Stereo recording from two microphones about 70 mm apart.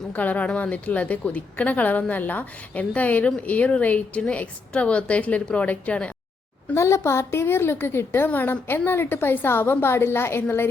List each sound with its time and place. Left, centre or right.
0.1 s a woman's voice: left
6.7 s a woman's voice: left